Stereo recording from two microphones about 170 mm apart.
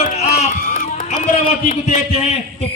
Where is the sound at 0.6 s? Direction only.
55° left (ahead or behind).